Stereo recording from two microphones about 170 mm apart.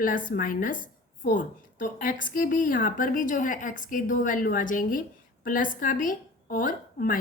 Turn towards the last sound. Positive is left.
turn(degrees=55)  # may be behind; listen again after turning